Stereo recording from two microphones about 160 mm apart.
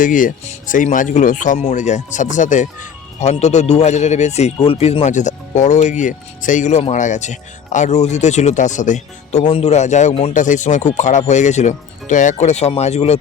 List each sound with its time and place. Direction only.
0.0 s speech: 55° left (ahead or behind)
9.4 s speech: 35° left (ahead or behind)